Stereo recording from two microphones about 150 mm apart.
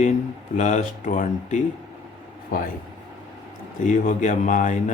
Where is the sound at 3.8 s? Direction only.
55° left (ahead or behind).